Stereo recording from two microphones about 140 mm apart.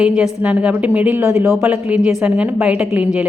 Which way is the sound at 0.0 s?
10° right (ahead or behind).